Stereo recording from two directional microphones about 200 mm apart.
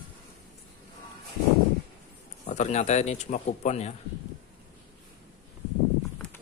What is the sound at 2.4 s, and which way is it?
Speech, 35° left (ahead or behind).